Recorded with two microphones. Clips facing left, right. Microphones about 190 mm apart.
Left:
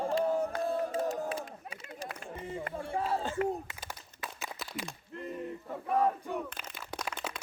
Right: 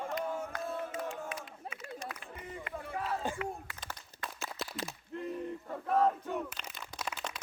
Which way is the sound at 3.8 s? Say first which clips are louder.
Left 1 dB; 10° left (ahead or behind).